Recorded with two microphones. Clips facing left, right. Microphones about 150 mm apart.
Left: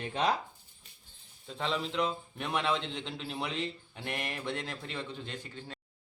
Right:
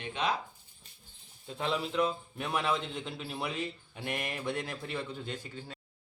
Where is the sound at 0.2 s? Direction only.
35° left (ahead or behind).